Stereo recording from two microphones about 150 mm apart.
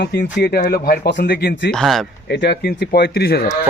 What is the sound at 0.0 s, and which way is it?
Speech, 90° left.